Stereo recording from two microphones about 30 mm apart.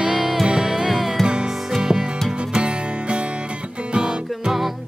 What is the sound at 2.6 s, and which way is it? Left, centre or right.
Music, right.